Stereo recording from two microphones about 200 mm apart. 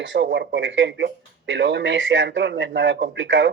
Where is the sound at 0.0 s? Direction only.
70° right (ahead or behind).